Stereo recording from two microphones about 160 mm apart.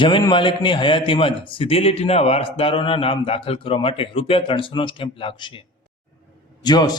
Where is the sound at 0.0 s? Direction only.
30° left (ahead or behind).